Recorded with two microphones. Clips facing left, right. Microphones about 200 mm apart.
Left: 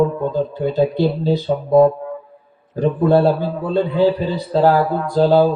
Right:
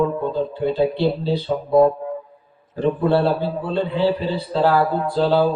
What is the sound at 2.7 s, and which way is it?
Speech, 45° left (ahead or behind).